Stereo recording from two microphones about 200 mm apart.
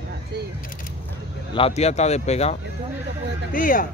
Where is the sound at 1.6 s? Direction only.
30° left (ahead or behind).